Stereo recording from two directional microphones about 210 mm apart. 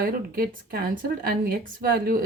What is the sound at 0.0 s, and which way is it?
Speech, 45° right (ahead or behind).